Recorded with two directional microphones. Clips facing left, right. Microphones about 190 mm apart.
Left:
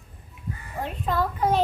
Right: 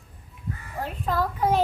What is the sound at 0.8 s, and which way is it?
Child singing, 5° right (ahead or behind).